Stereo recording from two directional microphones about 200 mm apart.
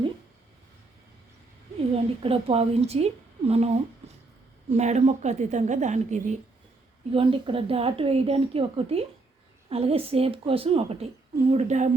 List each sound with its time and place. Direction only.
1.9 s a woman's voice: 30° right (ahead or behind)
7.1 s a woman's voice: 25° right (ahead or behind)